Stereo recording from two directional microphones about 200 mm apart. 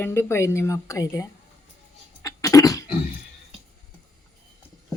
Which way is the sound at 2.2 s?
15° left (ahead or behind).